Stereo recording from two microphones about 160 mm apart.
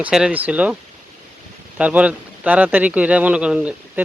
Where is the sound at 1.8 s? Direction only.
10° right (ahead or behind).